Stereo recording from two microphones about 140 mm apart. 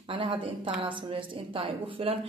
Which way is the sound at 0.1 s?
40° right (ahead or behind).